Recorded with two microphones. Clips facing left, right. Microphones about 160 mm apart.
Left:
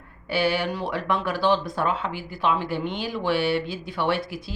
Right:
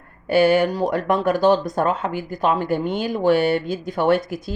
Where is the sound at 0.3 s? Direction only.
45° right (ahead or behind).